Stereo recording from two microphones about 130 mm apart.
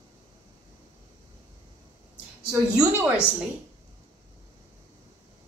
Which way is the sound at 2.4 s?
10° right (ahead or behind).